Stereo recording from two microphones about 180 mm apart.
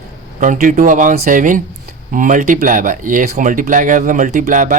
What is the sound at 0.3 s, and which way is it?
Speech, 45° right (ahead or behind).